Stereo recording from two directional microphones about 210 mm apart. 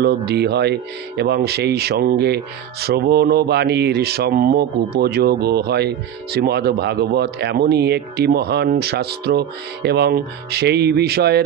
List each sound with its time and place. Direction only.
0.0 s speech: 50° right (ahead or behind)